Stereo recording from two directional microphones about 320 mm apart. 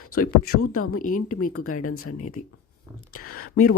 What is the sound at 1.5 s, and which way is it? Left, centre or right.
Speech, left.